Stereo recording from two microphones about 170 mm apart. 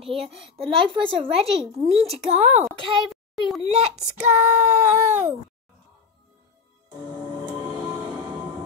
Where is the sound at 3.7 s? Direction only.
40° right (ahead or behind).